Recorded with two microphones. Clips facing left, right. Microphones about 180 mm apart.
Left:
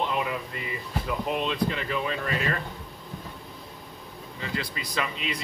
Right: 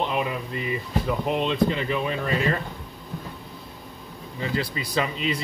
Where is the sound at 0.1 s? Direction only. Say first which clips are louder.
Right 3 dB; 20° right (ahead or behind).